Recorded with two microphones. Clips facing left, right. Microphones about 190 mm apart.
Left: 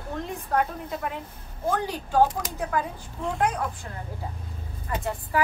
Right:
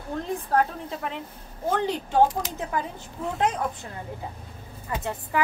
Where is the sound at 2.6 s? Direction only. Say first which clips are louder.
Left 2 dB; 25° right (ahead or behind).